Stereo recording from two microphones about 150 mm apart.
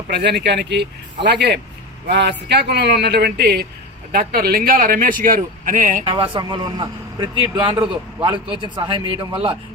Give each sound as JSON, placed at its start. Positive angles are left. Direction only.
{"t": 0.1, "sound": "a man's voice", "side_deg": -90}
{"t": 4.1, "sound": "a man's voice", "side_deg": -75}
{"t": 6.1, "sound": "a man's voice", "side_deg": -35}